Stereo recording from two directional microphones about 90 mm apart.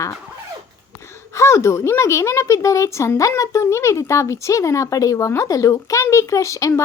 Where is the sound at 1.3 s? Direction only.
30° left (ahead or behind).